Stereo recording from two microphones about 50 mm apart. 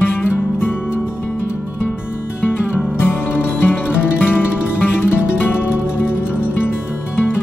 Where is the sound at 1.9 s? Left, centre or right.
Left.